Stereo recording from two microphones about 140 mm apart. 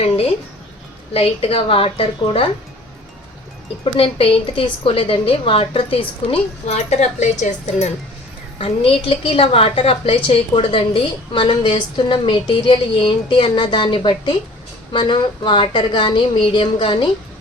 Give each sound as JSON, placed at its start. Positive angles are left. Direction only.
{"t": 1.1, "sound": "a woman's voice", "side_deg": 45}
{"t": 3.9, "sound": "a woman's voice", "side_deg": 40}
{"t": 6.7, "sound": "a woman's voice", "side_deg": 55}
{"t": 8.5, "sound": "a woman's voice", "side_deg": 40}